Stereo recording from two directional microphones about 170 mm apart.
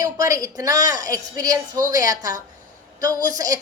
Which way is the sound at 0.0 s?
20° right (ahead or behind).